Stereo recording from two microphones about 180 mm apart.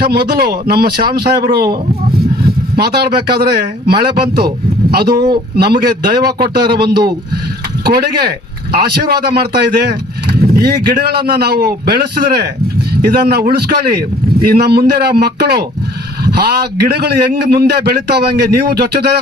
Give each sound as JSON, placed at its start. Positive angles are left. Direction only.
{"t": 0.0, "sound": "a man's voice", "side_deg": -60}
{"t": 13.1, "sound": "a man's voice", "side_deg": -60}